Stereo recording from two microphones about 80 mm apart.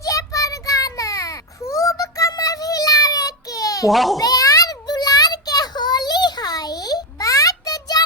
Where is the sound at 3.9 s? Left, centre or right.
Centre.